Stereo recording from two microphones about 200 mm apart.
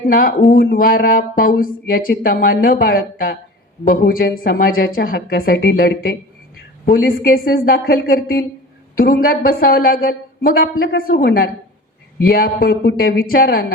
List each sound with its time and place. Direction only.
0.1 s speech: 45° left (ahead or behind)